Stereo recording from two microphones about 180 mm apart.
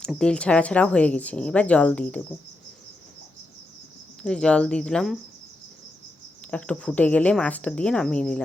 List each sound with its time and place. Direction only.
0.0 s speech: 5° left (ahead or behind)
4.2 s speech: 5° left (ahead or behind)
6.5 s speech: 5° left (ahead or behind)